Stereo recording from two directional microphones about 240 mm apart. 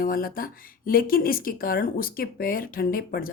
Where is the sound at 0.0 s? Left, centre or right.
Left.